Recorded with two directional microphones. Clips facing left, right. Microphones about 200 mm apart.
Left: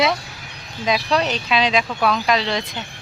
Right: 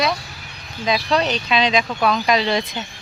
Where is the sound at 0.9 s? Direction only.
5° left (ahead or behind).